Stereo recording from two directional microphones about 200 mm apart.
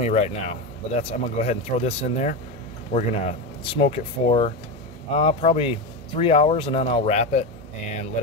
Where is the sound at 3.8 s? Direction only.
30° left (ahead or behind).